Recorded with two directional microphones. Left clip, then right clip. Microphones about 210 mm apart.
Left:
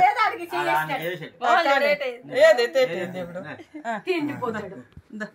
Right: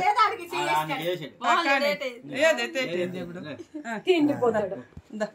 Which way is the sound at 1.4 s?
40° left (ahead or behind).